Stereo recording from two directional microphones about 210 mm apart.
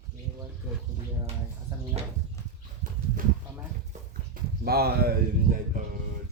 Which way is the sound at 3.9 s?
45° right (ahead or behind).